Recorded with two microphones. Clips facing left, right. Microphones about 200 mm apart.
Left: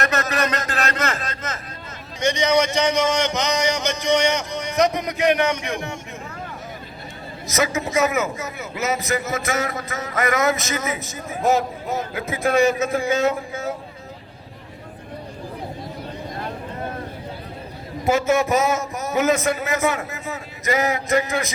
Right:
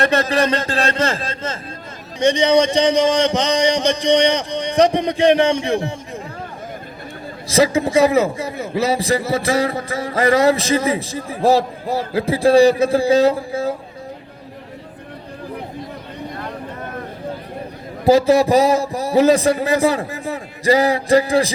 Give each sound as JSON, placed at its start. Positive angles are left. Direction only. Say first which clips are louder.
{"t": 0.0, "sound": "a man's voice", "louder": "right 6 dB", "side_deg": -30}
{"t": 7.4, "sound": "a man's voice", "louder": "right 7 dB", "side_deg": -30}
{"t": 18.0, "sound": "a man's voice", "louder": "right 6 dB", "side_deg": -35}